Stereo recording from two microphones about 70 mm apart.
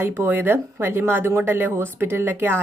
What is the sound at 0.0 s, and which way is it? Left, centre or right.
A woman's voice, right.